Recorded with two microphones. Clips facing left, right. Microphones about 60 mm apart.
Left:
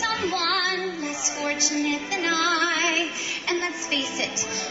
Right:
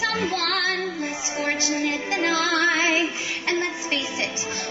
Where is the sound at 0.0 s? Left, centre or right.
Right.